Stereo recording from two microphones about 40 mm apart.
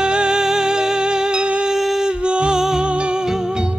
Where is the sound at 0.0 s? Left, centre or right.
Right.